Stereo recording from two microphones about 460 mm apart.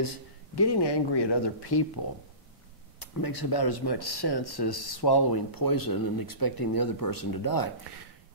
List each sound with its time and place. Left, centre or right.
0.0 s speech: left
3.0 s speech: left